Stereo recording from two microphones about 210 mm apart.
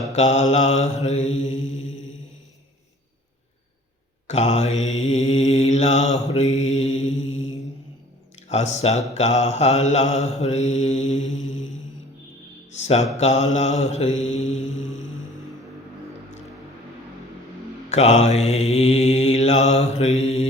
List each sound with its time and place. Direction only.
0.1 s mantra: 30° left (ahead or behind)
4.3 s mantra: 30° left (ahead or behind)
8.4 s speech: 30° left (ahead or behind)
9.1 s mantra: 35° left (ahead or behind)
12.7 s mantra: 30° left (ahead or behind)
17.8 s mantra: 30° left (ahead or behind)